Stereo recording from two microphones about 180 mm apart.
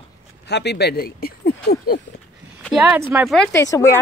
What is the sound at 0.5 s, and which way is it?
Speech, 70° left (ahead or behind).